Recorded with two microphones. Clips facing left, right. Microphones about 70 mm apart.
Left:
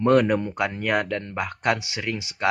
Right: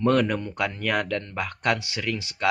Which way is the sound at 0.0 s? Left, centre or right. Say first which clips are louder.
Left 3 dB; centre.